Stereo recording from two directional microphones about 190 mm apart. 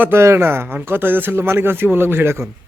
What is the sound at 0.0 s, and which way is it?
Speech, 15° right (ahead or behind).